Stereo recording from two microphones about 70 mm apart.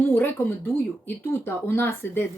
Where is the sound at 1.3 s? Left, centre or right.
Left.